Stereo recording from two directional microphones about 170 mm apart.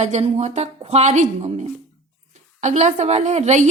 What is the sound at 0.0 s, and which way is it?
A woman's voice, 40° right (ahead or behind).